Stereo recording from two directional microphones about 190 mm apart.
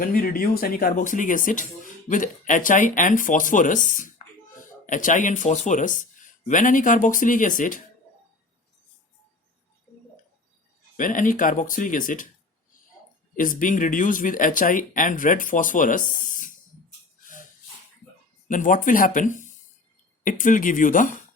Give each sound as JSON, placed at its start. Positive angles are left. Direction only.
{"t": 0.0, "sound": "speech", "side_deg": 50}
{"t": 10.9, "sound": "speech", "side_deg": 45}
{"t": 13.3, "sound": "speech", "side_deg": 45}
{"t": 18.4, "sound": "speech", "side_deg": 45}